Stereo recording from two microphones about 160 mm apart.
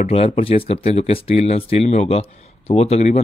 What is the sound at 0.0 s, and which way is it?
Speech, 40° left (ahead or behind).